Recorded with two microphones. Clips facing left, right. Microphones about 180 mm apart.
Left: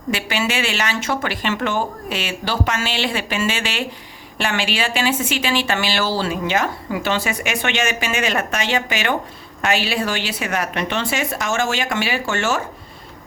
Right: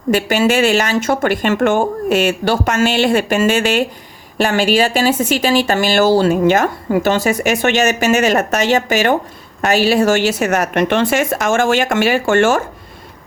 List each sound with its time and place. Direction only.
0.1 s a woman's voice: 45° right (ahead or behind)